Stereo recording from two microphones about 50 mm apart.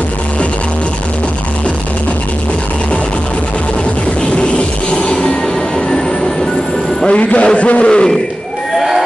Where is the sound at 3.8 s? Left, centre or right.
Left.